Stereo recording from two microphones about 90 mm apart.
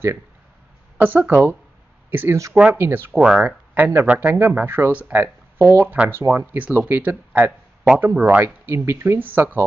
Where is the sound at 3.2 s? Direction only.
10° right (ahead or behind).